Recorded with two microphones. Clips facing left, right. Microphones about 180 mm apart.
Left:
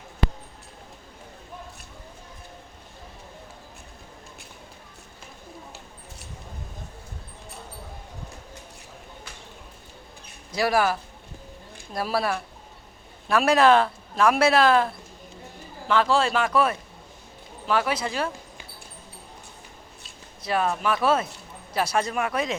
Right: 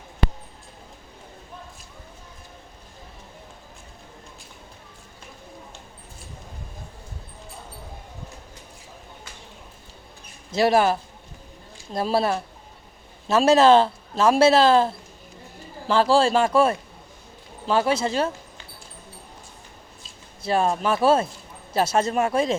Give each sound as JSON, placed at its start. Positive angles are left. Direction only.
{"t": 10.5, "sound": "a man's voice", "side_deg": -25}
{"t": 11.9, "sound": "a man's voice", "side_deg": -25}
{"t": 20.4, "sound": "a man's voice", "side_deg": -30}